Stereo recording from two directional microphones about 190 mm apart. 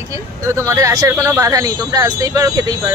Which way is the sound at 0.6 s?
15° right (ahead or behind).